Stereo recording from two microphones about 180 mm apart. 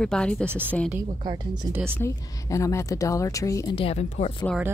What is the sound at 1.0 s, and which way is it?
Speech, 25° right (ahead or behind).